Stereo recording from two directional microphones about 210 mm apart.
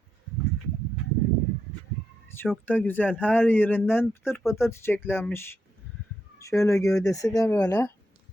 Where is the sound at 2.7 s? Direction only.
10° left (ahead or behind).